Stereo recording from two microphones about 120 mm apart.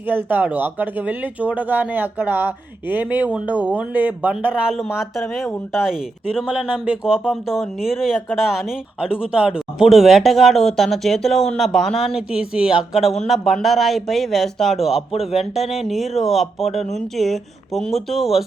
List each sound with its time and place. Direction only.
0.0 s speech: 15° right (ahead or behind)